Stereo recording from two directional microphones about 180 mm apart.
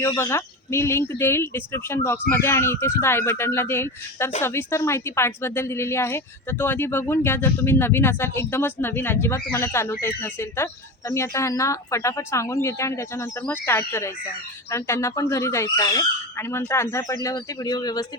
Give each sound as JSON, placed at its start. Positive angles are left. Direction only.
{"t": 0.1, "sound": "a woman's voice", "side_deg": 15}